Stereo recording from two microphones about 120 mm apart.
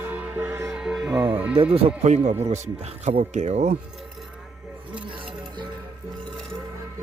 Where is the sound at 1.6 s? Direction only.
55° right (ahead or behind).